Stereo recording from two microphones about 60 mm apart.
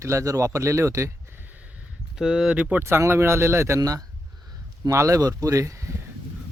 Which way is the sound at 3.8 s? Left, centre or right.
Right.